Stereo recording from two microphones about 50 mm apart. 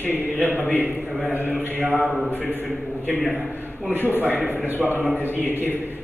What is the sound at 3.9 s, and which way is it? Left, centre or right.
A man's voice, right.